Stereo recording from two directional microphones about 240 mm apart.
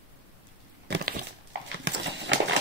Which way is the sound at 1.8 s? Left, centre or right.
Right.